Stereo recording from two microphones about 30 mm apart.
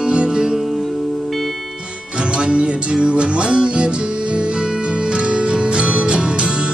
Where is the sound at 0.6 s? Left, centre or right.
Centre.